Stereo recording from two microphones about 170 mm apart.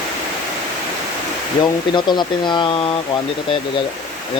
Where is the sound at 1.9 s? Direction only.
25° left (ahead or behind).